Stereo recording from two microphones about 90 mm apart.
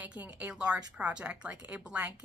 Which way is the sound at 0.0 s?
15° right (ahead or behind).